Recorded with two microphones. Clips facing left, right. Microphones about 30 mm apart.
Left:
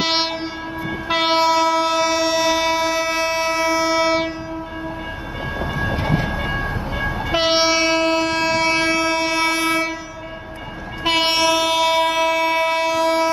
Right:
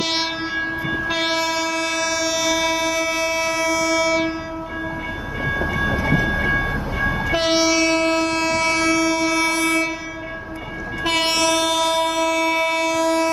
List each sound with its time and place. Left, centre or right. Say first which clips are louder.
0.0 s train: left 2 dB; left
5.6 s train: even; left
7.2 s train: left 2 dB; left
8.0 s train: left 1 dB; centre
11.1 s train: left 2 dB; left